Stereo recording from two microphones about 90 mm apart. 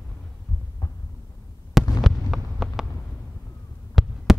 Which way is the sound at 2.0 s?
Centre (ahead or behind).